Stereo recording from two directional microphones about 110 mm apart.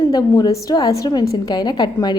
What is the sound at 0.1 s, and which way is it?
A woman's voice, 35° left (ahead or behind).